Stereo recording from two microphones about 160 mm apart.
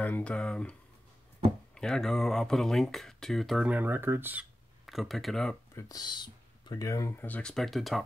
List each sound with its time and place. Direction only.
0.0 s speech: 10° left (ahead or behind)
1.8 s speech: 5° left (ahead or behind)
4.8 s speech: centre (ahead or behind)
5.8 s speech: 25° left (ahead or behind); by 8.0 s centre (ahead or behind)